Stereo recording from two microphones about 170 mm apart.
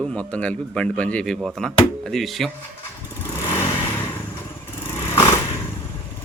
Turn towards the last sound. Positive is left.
turn(degrees=20)  # may be behind; listen again after turning